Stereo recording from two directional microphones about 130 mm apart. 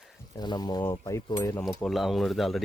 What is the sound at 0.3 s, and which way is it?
Speech, 30° left (ahead or behind).